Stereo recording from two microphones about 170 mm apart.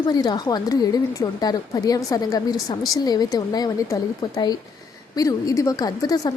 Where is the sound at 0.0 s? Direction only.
25° left (ahead or behind).